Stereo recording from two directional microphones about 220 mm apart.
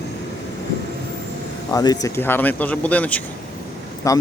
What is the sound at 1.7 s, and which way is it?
A man's voice, 15° left (ahead or behind).